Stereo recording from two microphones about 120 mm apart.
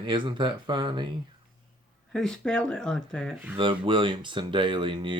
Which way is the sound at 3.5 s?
45° right (ahead or behind).